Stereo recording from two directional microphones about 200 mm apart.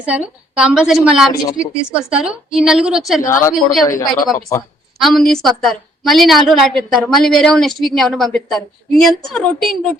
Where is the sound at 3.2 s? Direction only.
15° left (ahead or behind).